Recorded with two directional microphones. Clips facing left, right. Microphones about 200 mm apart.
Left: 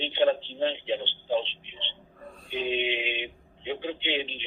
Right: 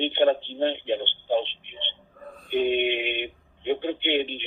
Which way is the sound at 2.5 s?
55° right (ahead or behind).